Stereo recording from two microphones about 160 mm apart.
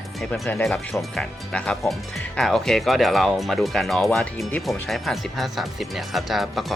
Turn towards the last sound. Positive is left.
turn(degrees=0)  # may be behind; listen again after turning